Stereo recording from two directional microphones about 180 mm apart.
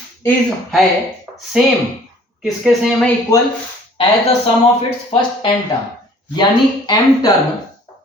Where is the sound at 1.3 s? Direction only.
15° right (ahead or behind).